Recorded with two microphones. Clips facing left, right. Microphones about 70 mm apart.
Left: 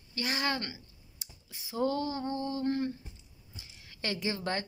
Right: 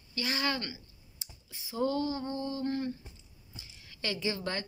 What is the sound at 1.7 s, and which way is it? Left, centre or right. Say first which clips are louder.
A woman's voice: even; left.